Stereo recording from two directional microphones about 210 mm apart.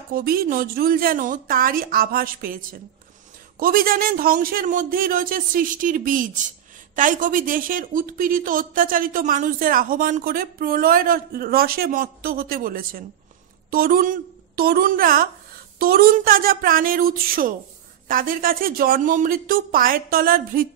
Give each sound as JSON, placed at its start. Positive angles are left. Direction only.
{"t": 0.1, "sound": "a woman's voice", "side_deg": -45}